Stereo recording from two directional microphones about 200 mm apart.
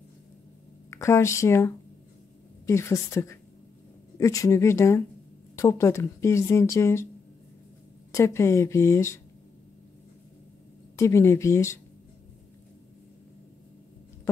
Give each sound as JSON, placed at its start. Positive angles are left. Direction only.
{"t": 0.8, "sound": "speech", "side_deg": 15}
{"t": 8.1, "sound": "speech", "side_deg": 15}
{"t": 11.0, "sound": "speech", "side_deg": 15}